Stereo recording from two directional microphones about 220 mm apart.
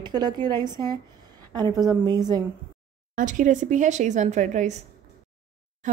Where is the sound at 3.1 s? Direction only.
35° right (ahead or behind).